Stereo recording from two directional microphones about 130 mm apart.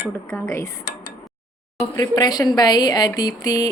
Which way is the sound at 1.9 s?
30° left (ahead or behind).